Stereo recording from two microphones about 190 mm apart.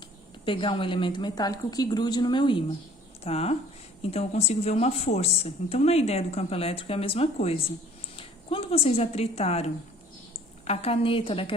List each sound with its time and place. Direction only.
0.4 s a woman's voice: 25° left (ahead or behind)
10.7 s a woman's voice: 30° left (ahead or behind)